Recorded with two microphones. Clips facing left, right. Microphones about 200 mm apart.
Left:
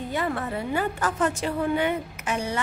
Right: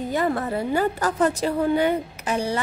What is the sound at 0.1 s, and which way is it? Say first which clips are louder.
A woman's voice: right 4 dB; 40° right (ahead or behind).